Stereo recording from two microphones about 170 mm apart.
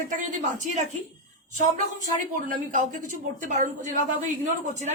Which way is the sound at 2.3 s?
50° right (ahead or behind).